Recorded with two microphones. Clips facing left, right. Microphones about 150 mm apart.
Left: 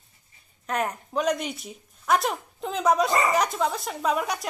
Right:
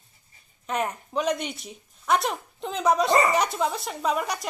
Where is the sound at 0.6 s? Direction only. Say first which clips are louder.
Even; centre (ahead or behind).